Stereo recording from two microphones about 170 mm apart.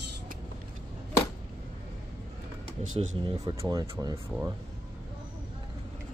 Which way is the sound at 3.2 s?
30° right (ahead or behind).